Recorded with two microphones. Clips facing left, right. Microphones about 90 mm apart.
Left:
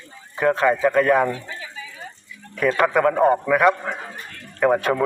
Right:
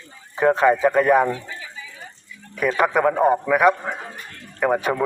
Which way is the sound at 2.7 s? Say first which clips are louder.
Left 1 dB; 10° right (ahead or behind).